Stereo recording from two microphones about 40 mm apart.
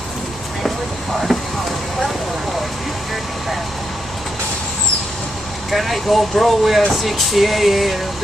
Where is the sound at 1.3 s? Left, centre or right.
Centre.